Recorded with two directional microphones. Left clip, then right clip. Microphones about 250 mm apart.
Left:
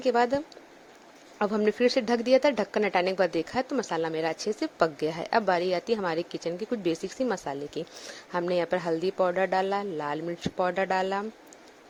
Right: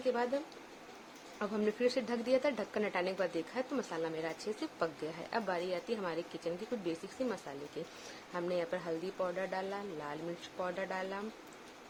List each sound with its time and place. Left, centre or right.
1.4 s speech: left